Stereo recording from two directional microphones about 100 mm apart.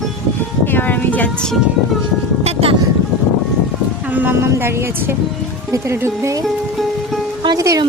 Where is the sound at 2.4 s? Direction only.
85° right.